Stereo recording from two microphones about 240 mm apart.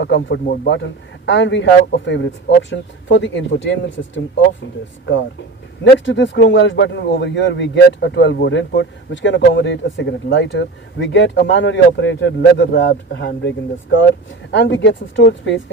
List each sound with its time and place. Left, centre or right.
0.0 s speech: left
5.8 s speech: left
14.5 s speech: left